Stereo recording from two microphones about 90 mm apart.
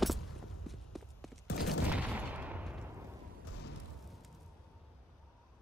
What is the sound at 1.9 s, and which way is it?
Fusillade, 15° right (ahead or behind).